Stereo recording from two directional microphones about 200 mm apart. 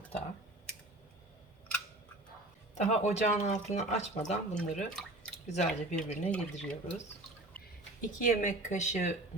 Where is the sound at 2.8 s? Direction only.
35° left (ahead or behind).